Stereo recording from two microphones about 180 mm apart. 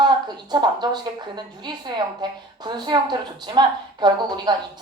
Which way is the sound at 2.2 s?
25° right (ahead or behind).